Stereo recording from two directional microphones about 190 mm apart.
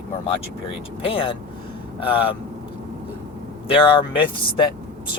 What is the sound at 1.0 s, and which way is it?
Speech, 30° left (ahead or behind).